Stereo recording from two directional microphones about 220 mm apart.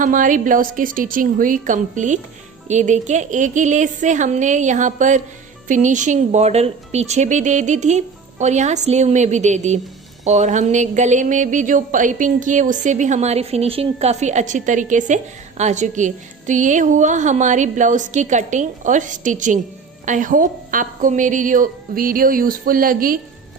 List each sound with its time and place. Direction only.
0.0 s speech: 35° right (ahead or behind)